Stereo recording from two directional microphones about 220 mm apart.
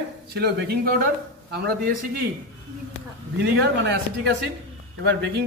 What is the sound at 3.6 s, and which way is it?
Speech, 50° right (ahead or behind).